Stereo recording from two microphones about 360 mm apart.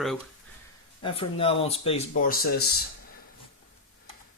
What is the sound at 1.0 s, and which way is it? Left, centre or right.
Speech, centre.